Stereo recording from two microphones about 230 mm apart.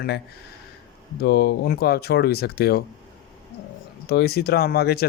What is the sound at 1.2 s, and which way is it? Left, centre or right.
Speech, left.